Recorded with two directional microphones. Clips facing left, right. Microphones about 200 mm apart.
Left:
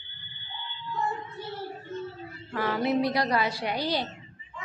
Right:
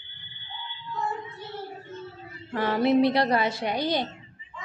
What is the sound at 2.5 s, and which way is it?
A woman's voice, 30° right (ahead or behind).